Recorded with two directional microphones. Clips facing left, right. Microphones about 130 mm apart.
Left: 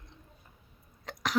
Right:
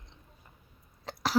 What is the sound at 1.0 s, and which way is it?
Hiccup, 35° right (ahead or behind).